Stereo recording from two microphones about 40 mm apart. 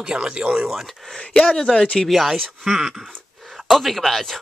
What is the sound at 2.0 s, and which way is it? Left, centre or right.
Speech, centre.